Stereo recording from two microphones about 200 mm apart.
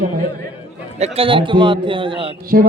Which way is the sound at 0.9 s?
30° right (ahead or behind).